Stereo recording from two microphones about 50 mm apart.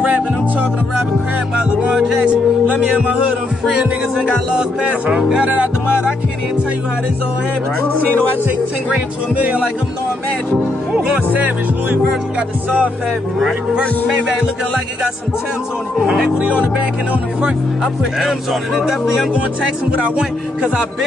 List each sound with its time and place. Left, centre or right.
0.0 s music: right
1.6 s a man's voice: right
4.2 s a man's voice: centre
9.3 s a man's voice: right
10.9 s speech: centre
11.2 s speech: right
16.0 s a man's voice: centre
18.2 s speech: centre
20.2 s music: centre